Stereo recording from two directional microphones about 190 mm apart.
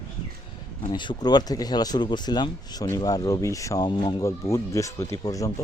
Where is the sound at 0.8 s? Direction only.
25° left (ahead or behind).